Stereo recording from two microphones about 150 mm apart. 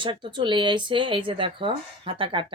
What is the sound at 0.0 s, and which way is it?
A woman's voice, 35° right (ahead or behind).